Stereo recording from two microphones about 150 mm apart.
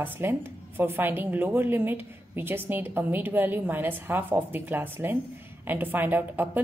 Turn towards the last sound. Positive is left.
turn(degrees=-10)  # may be behind; listen again after turning